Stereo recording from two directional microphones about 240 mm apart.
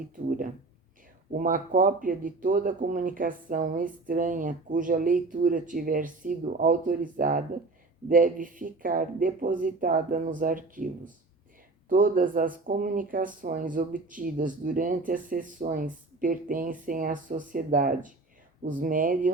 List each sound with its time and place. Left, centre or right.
0.3 s speech: right